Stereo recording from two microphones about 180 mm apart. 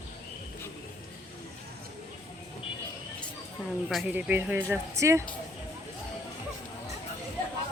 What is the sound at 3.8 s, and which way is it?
Speech, 5° right (ahead or behind).